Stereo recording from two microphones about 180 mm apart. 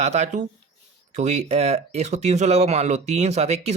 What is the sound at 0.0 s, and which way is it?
Speech, 40° right (ahead or behind).